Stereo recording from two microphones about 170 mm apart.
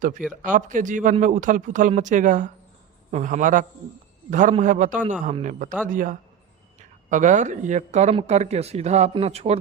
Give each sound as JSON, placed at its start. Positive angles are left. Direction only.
{"t": 0.4, "sound": "a man's voice", "side_deg": -50}